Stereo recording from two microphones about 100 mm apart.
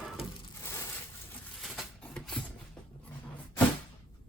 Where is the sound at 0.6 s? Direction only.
30° left (ahead or behind).